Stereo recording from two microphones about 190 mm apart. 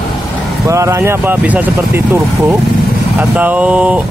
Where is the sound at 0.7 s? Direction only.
15° right (ahead or behind).